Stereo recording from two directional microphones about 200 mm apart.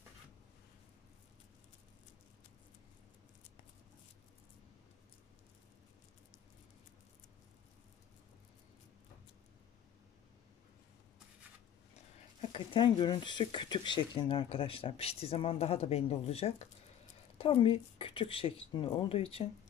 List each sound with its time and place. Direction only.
12.4 s speech: 25° left (ahead or behind)